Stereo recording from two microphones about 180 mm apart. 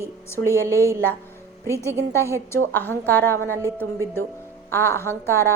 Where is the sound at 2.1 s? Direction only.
15° left (ahead or behind).